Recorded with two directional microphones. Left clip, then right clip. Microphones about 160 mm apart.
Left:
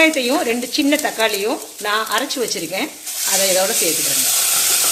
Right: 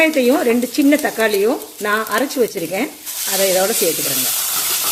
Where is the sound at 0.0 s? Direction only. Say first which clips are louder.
Right 1 dB; 50° right (ahead or behind).